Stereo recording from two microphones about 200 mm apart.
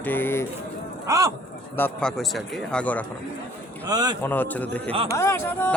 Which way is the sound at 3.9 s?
20° right (ahead or behind).